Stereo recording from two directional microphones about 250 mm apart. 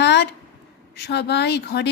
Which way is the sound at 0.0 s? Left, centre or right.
Left.